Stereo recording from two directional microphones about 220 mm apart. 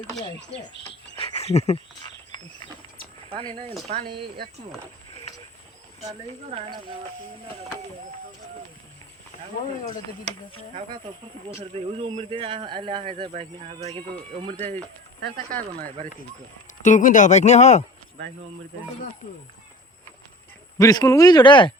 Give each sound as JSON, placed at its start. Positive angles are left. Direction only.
{"t": 0.3, "sound": "speech", "side_deg": 50}
{"t": 1.1, "sound": "a sound", "side_deg": 25}
{"t": 3.2, "sound": "a man's voice", "side_deg": -20}
{"t": 10.8, "sound": "a man's voice", "side_deg": -25}
{"t": 16.8, "sound": "speech", "side_deg": 35}
{"t": 20.7, "sound": "speech", "side_deg": 15}